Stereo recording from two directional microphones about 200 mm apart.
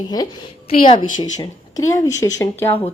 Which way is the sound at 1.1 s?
20° left (ahead or behind).